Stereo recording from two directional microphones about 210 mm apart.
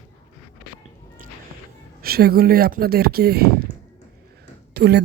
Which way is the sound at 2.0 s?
45° right (ahead or behind).